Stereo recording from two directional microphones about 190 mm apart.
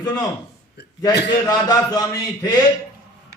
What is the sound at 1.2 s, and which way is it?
A man's voice, 20° left (ahead or behind).